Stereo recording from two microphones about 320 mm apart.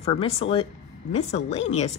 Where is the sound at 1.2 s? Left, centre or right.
Left.